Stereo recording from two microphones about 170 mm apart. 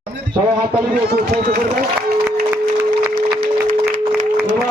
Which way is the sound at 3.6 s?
50° right (ahead or behind).